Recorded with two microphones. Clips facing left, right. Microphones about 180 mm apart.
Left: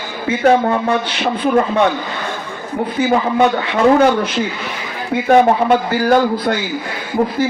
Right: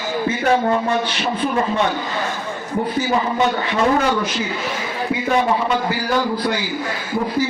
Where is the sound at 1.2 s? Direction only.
50° left (ahead or behind).